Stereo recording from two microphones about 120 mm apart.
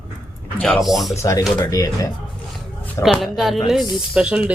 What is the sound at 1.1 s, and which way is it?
Speech, 25° left (ahead or behind).